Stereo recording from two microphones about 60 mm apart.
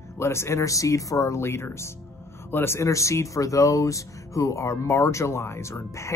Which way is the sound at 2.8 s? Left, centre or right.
Left.